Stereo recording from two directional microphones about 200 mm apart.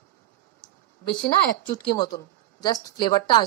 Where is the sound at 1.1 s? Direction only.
25° left (ahead or behind).